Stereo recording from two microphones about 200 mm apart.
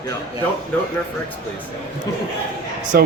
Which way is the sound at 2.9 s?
45° right (ahead or behind).